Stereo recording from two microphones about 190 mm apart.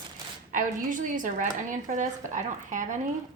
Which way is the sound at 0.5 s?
45° right (ahead or behind).